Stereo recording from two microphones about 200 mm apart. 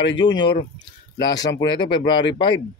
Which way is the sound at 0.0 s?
65° left (ahead or behind).